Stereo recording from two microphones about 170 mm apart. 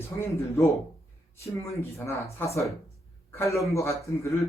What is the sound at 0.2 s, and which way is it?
Speech, 15° left (ahead or behind).